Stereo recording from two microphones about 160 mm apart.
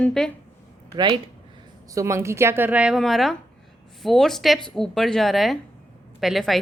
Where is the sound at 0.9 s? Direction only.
25° right (ahead or behind).